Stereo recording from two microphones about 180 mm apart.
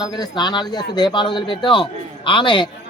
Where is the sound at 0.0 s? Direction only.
25° left (ahead or behind).